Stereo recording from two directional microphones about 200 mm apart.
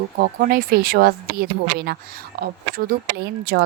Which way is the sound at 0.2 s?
45° right (ahead or behind).